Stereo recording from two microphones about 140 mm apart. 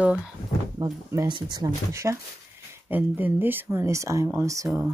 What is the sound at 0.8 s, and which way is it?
Speech, 25° right (ahead or behind).